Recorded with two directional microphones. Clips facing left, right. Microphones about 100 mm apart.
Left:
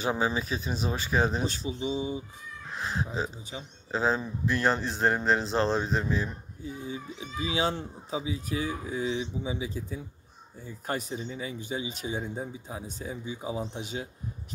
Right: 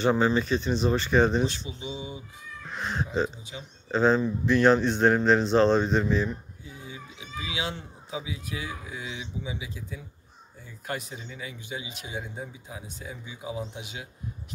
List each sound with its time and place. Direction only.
0.0 s speech: 10° left (ahead or behind)
1.8 s speech: 35° left (ahead or behind)
2.7 s speech: centre (ahead or behind)
6.7 s speech: 35° left (ahead or behind)